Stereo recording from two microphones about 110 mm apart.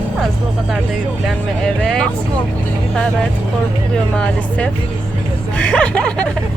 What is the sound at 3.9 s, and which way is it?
Speech, 10° left (ahead or behind).